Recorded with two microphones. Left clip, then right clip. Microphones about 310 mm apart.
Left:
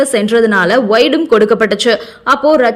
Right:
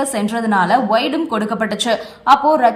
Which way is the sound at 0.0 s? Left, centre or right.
Centre.